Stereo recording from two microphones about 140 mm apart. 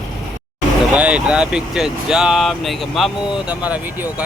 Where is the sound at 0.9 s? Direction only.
10° right (ahead or behind).